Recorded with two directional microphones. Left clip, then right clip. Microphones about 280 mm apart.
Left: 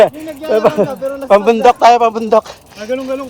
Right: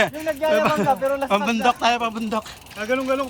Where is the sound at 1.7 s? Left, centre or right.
Left.